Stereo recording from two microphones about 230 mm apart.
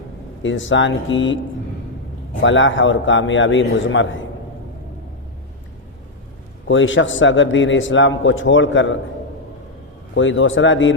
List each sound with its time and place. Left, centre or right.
0.4 s a man's voice: left
2.4 s a man's voice: left
6.7 s a man's voice: left
10.2 s a man's voice: left